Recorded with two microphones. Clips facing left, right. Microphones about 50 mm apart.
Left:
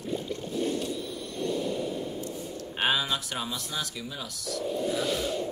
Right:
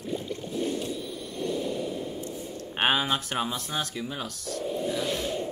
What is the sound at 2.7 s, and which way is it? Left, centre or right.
Speech, right.